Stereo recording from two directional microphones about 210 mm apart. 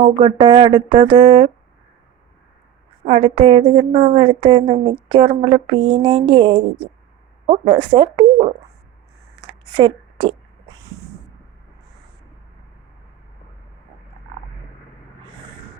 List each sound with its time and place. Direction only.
0.0 s a woman's voice: 25° right (ahead or behind)
3.0 s a woman's voice: 30° right (ahead or behind)
9.4 s a sound: 20° right (ahead or behind)